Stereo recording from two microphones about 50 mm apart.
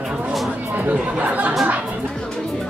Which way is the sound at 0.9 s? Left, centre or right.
Right.